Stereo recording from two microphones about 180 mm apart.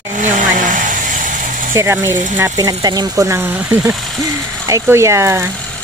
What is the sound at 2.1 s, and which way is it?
Speech, 45° right (ahead or behind).